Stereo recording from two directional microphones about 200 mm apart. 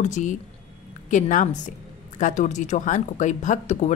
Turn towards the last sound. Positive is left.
turn(degrees=35)  # may be behind; listen again after turning